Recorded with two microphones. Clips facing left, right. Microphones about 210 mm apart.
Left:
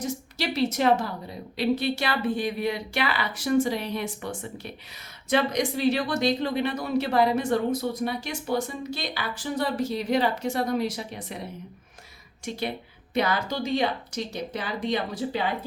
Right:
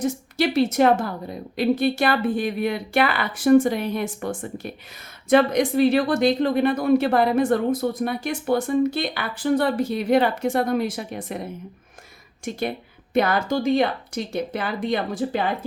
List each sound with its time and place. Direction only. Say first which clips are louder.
0.0 s a woman's voice: right 7 dB; 50° right (ahead or behind)
12.5 s a woman's voice: right 4 dB; 50° right (ahead or behind)